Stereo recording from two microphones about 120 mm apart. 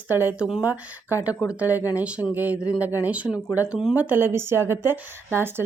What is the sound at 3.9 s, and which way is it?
A woman's voice, 15° right (ahead or behind).